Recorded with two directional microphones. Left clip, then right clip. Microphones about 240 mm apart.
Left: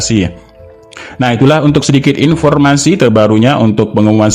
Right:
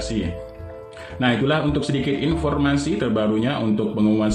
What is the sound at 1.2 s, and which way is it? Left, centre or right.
Speech, left.